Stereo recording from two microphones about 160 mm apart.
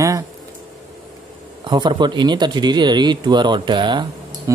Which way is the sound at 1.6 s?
30° right (ahead or behind).